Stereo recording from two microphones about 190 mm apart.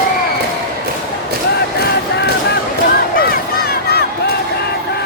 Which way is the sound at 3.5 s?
55° left (ahead or behind).